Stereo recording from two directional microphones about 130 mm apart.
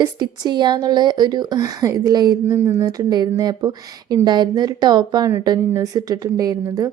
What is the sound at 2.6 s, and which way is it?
Speech, 15° right (ahead or behind).